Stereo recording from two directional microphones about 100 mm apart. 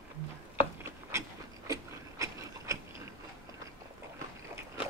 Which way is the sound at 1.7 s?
35° right (ahead or behind).